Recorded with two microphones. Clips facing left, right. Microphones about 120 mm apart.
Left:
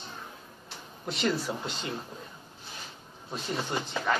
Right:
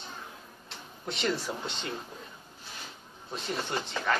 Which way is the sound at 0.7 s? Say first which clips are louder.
Left 1 dB; centre (ahead or behind).